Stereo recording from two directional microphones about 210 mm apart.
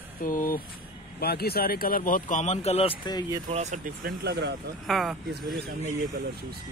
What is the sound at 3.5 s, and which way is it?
Speech, 35° right (ahead or behind).